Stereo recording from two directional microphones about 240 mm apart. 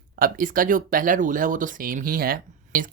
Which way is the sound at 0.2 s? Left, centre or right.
Right.